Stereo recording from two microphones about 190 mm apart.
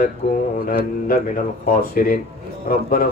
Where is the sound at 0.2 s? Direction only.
50° left (ahead or behind).